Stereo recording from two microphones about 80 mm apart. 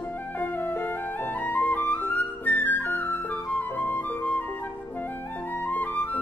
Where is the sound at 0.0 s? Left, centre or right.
Left.